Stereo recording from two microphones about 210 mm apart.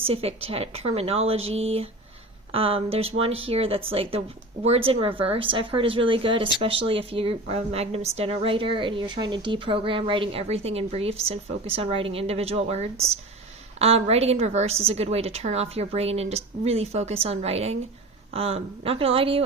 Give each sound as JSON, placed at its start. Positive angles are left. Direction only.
{"t": 0.1, "sound": "a woman's voice", "side_deg": -30}